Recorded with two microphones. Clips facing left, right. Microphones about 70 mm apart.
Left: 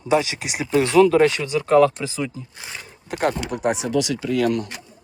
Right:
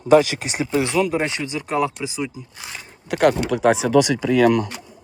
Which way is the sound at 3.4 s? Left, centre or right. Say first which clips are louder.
Right 5 dB; right.